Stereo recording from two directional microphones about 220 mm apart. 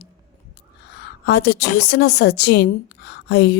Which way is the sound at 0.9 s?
50° left (ahead or behind).